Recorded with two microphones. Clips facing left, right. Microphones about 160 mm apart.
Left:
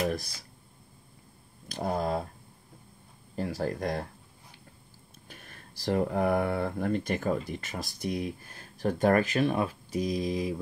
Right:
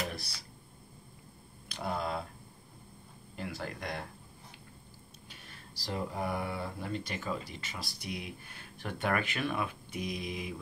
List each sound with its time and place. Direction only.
0.0 s a sound: 45° left (ahead or behind)
1.7 s speech: 40° left (ahead or behind)
3.3 s speech: 40° left (ahead or behind)
5.3 s speech: 50° left (ahead or behind)